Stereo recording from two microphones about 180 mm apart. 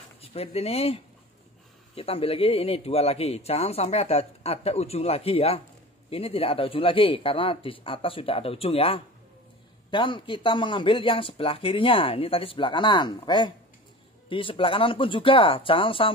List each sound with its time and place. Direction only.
0.2 s speech: 35° left (ahead or behind)